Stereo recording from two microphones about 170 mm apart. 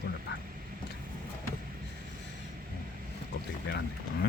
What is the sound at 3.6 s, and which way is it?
Speech, 75° left (ahead or behind).